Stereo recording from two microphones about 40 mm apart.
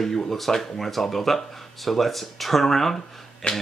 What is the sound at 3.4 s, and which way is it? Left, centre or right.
Speech, left.